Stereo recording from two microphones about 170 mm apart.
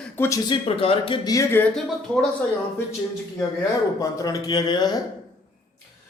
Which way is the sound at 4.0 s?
20° left (ahead or behind).